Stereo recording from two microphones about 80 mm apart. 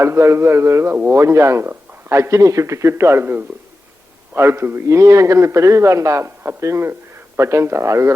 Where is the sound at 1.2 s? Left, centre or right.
Right.